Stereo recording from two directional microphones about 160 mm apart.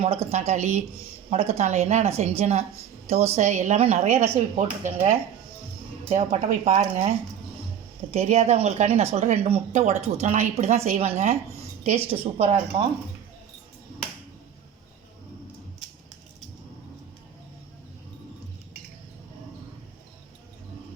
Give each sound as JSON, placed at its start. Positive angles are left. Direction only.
{"t": 0.3, "sound": "speech", "side_deg": -45}
{"t": 8.1, "sound": "speech", "side_deg": -45}
{"t": 12.4, "sound": "speech", "side_deg": -35}